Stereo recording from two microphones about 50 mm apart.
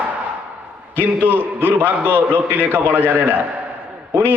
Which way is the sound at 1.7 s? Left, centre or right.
Right.